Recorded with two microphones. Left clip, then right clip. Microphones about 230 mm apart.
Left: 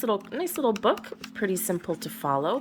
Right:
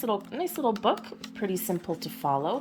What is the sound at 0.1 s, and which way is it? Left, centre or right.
Speech, centre.